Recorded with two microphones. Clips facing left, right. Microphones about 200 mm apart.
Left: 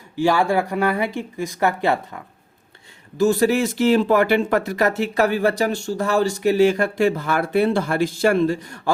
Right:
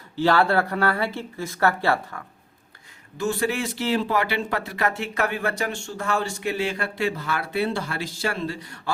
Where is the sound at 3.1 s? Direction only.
40° left (ahead or behind).